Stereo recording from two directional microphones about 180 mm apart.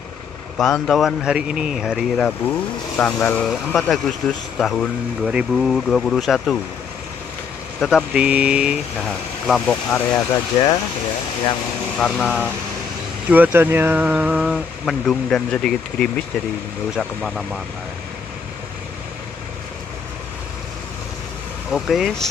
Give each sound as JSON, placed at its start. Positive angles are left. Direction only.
{"t": 0.6, "sound": "speech", "side_deg": 0}
{"t": 7.8, "sound": "speech", "side_deg": -5}
{"t": 9.5, "sound": "speech", "side_deg": 5}
{"t": 10.1, "sound": "speech", "side_deg": 20}
{"t": 12.0, "sound": "speech", "side_deg": 0}
{"t": 13.3, "sound": "speech", "side_deg": -10}
{"t": 21.7, "sound": "speech", "side_deg": 0}